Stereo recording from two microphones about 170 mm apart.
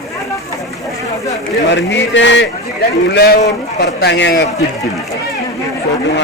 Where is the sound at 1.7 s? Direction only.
90° left.